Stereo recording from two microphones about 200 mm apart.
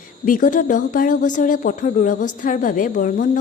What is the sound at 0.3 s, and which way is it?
A woman's voice, 40° left (ahead or behind).